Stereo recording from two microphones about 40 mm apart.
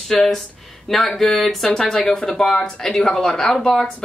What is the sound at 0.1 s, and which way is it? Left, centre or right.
Speech, centre.